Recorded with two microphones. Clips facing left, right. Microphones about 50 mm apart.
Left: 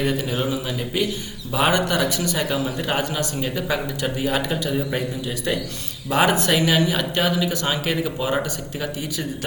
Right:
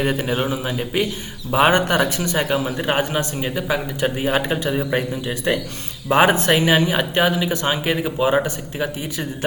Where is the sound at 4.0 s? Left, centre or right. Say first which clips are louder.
Right 3 dB; right.